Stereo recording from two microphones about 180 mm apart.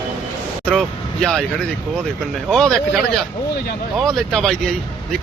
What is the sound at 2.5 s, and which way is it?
Speech, 5° left (ahead or behind).